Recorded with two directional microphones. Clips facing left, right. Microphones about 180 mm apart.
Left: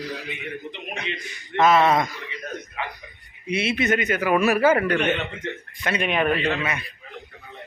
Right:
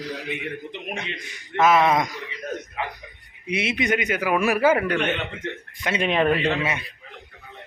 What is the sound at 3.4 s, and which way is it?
A man's voice, 20° right (ahead or behind).